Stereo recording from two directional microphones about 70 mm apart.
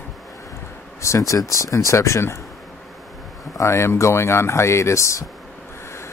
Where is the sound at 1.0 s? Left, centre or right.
Left.